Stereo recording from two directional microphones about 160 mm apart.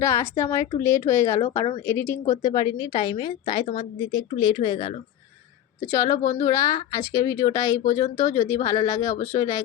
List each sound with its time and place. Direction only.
0.0 s a woman's voice: 15° left (ahead or behind)
6.0 s a woman's voice: 20° left (ahead or behind)